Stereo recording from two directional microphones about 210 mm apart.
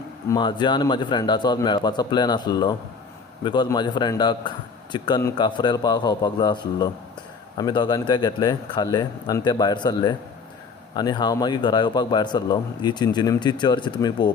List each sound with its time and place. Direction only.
0.3 s a man's voice: 20° left (ahead or behind)